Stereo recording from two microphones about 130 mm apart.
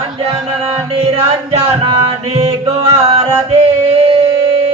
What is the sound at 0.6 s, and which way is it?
Music, 45° right (ahead or behind).